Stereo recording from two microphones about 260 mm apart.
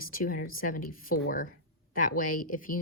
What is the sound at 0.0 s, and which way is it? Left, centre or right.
Speech, left.